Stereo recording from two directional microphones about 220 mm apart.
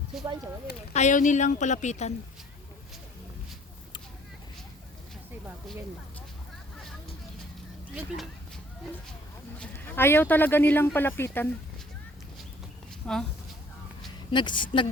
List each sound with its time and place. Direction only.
0.9 s a woman's voice: 35° left (ahead or behind)
7.9 s speech: centre (ahead or behind)
9.6 s speech: 10° left (ahead or behind)
13.0 s speech: 5° left (ahead or behind)
14.3 s a woman's voice: 20° left (ahead or behind)